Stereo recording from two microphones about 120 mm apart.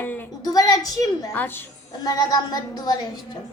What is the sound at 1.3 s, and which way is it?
Speech, 20° left (ahead or behind).